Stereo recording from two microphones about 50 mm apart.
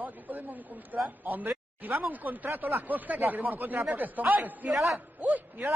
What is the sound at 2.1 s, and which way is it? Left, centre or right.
Speech, right.